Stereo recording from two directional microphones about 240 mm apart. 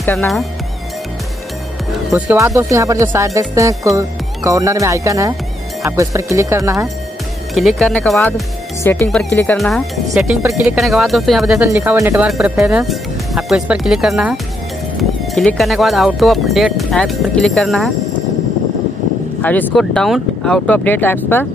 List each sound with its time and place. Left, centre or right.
0.0 s speech: centre
2.0 s speech: centre
7.5 s speech: centre
19.4 s speech: centre